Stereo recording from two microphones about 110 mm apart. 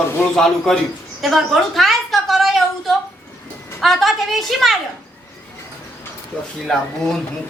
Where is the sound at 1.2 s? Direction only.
Centre (ahead or behind).